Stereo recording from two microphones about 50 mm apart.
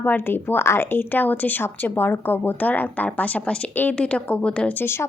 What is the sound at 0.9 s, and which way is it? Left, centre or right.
A woman's voice, left.